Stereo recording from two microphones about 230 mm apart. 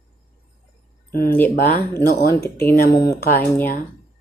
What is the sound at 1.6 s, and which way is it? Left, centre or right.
Speech, left.